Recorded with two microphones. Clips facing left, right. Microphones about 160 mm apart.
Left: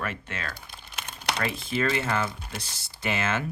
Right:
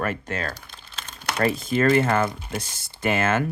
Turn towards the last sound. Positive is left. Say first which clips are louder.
# right 6 dB
turn(degrees=-50)  # may be behind; listen again after turning